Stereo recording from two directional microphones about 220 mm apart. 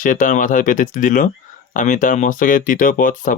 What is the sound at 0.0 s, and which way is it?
Speech, 35° left (ahead or behind).